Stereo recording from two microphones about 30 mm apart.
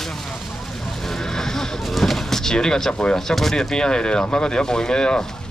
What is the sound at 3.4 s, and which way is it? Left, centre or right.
Speech, centre.